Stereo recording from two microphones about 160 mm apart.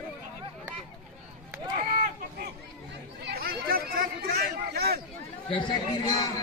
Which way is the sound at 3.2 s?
75° right (ahead or behind).